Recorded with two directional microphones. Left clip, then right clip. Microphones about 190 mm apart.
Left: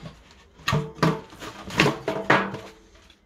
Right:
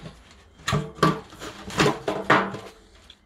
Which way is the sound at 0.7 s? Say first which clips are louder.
Right 1 dB; centre (ahead or behind).